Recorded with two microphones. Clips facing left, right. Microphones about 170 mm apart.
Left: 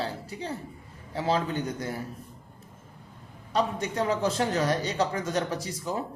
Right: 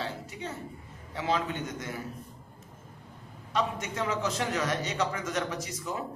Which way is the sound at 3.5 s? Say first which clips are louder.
Left 3 dB; 35° left (ahead or behind).